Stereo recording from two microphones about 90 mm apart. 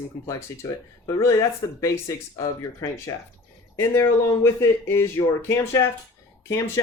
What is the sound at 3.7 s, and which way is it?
Speech, 30° left (ahead or behind).